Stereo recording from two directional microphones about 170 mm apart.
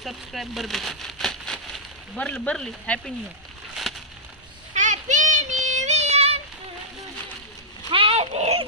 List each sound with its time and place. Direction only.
0.0 s speech: centre (ahead or behind)
4.7 s child singing: 45° right (ahead or behind)
7.9 s a sound: 35° right (ahead or behind)